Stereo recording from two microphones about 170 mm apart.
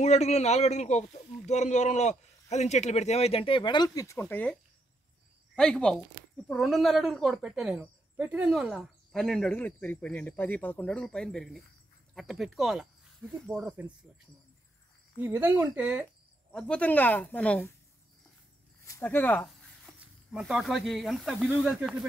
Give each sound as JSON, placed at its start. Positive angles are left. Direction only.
{"t": 0.0, "sound": "a man's voice", "side_deg": 40}
{"t": 5.6, "sound": "speech", "side_deg": 5}
{"t": 15.1, "sound": "speech", "side_deg": -10}
{"t": 16.5, "sound": "speech", "side_deg": 5}
{"t": 18.9, "sound": "speech", "side_deg": 15}
{"t": 20.3, "sound": "speech", "side_deg": 0}